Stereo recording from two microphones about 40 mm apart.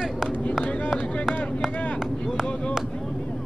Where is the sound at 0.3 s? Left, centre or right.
Left.